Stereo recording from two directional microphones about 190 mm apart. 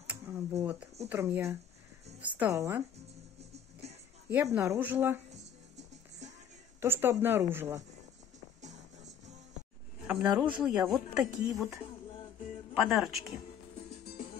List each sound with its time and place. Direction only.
0.0 s a woman's voice: 10° right (ahead or behind)
4.3 s a woman's voice: 10° right (ahead or behind)
6.8 s a woman's voice: 10° right (ahead or behind)
10.0 s speech: 5° right (ahead or behind)
12.8 s speech: centre (ahead or behind)